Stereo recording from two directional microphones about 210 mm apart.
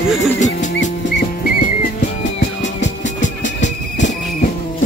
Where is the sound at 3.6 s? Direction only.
35° left (ahead or behind).